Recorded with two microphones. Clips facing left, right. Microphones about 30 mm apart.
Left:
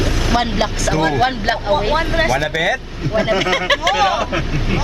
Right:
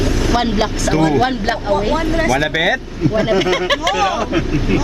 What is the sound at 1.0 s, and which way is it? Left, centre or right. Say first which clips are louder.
Speech: right 2 dB; left.